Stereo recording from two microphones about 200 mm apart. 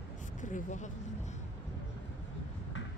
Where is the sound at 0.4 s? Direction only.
40° left (ahead or behind).